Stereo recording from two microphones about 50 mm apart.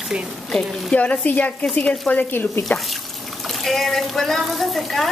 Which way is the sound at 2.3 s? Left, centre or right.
Left.